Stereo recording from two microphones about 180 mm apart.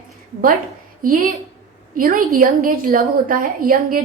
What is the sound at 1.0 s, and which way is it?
A woman's voice, 50° right (ahead or behind).